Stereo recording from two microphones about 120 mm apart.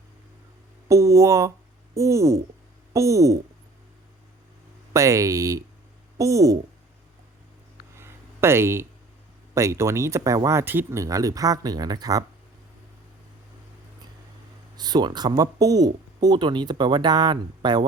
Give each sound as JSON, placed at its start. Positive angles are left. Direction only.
{"t": 0.9, "sound": "speech", "side_deg": -25}
{"t": 4.9, "sound": "speech", "side_deg": -25}
{"t": 7.9, "sound": "a sound", "side_deg": -20}
{"t": 9.6, "sound": "speech", "side_deg": -25}
{"t": 14.8, "sound": "speech", "side_deg": -35}